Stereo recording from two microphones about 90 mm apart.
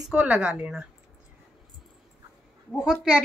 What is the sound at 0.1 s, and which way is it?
Speech, 10° right (ahead or behind).